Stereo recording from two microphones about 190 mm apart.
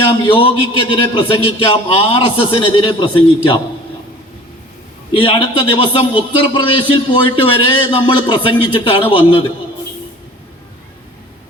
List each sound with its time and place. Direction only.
0.3 s speech: 30° left (ahead or behind)
5.1 s speech: 25° left (ahead or behind)